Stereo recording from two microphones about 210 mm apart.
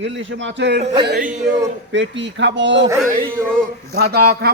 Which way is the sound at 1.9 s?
60° right (ahead or behind).